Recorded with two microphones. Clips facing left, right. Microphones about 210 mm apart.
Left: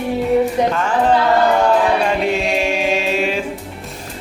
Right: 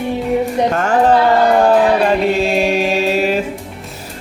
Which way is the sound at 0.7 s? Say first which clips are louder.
Right 3 dB; 45° right (ahead or behind).